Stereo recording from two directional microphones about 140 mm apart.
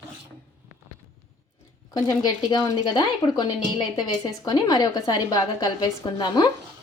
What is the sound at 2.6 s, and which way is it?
A woman's voice, 30° left (ahead or behind).